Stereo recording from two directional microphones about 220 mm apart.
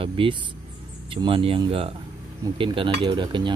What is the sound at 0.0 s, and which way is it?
Speech, 25° right (ahead or behind).